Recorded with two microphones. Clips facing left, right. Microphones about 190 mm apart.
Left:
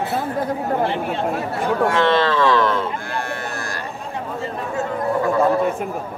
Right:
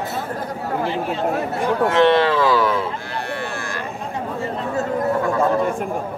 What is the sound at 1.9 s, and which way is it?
Speech, 20° right (ahead or behind).